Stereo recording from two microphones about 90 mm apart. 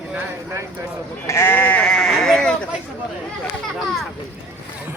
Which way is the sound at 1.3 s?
30° left (ahead or behind).